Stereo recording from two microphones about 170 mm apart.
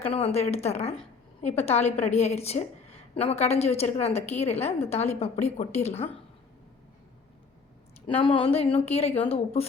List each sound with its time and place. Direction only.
0.0 s a woman's voice: 35° left (ahead or behind)
8.0 s a woman's voice: 30° left (ahead or behind)